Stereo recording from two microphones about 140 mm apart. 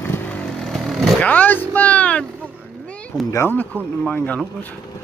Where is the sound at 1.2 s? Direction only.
10° left (ahead or behind).